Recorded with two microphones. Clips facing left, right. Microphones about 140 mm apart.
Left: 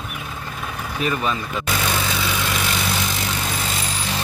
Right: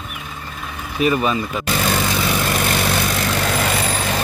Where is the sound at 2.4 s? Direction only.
50° right (ahead or behind).